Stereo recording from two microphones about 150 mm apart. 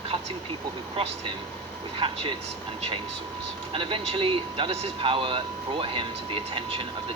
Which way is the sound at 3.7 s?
35° right (ahead or behind).